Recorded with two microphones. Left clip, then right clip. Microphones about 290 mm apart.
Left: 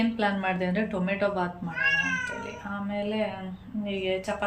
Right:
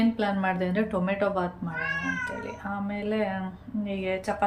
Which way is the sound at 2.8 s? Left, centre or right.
Centre.